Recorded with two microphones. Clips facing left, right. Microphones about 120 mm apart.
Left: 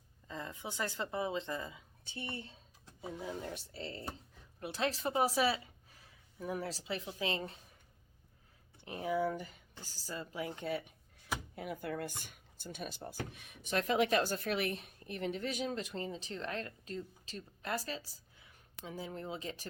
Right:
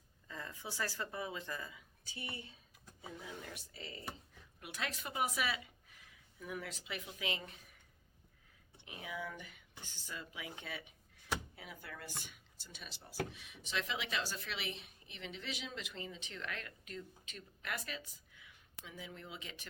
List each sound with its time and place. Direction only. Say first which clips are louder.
0.3 s a woman's voice: left 4 dB; 20° left (ahead or behind)
8.8 s speech: left 11 dB; 40° left (ahead or behind)